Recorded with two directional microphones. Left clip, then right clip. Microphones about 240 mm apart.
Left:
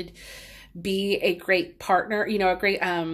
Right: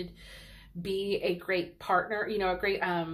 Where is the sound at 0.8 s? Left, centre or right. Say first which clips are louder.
Left 6 dB; left.